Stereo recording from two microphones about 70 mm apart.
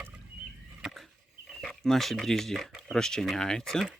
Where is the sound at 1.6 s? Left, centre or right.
Centre.